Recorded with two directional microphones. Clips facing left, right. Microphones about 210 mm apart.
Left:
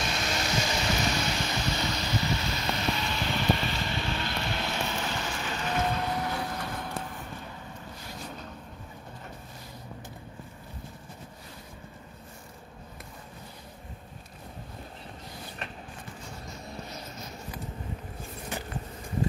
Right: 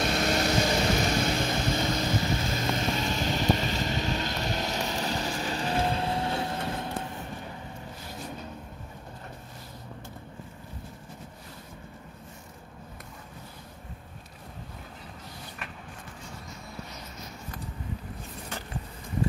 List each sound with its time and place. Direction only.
0.0 s vehicle: 55° right (ahead or behind); by 6.9 s 25° right (ahead or behind)